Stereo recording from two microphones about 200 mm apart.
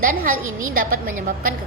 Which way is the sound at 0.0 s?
45° right (ahead or behind).